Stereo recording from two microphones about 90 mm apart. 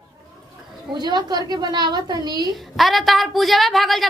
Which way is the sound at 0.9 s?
50° right (ahead or behind).